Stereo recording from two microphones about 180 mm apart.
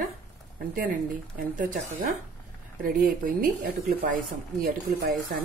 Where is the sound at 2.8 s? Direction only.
50° right (ahead or behind).